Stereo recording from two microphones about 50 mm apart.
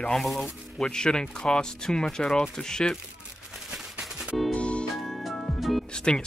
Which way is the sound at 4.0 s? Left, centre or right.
Centre.